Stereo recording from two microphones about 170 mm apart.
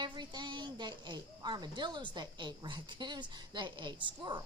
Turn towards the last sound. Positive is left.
turn(degrees=-25)  # may be behind; listen again after turning